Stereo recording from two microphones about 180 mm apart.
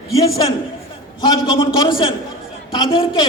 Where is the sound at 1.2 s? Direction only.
25° left (ahead or behind).